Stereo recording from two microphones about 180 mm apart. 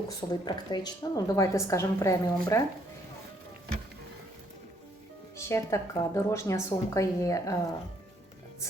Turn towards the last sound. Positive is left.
turn(degrees=20)  # may be behind; listen again after turning